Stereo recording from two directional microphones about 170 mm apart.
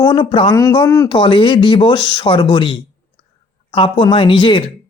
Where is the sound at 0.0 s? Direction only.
25° left (ahead or behind).